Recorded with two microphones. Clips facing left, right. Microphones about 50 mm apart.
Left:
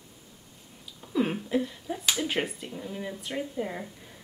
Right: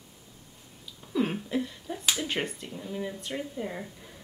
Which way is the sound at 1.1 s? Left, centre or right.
Centre.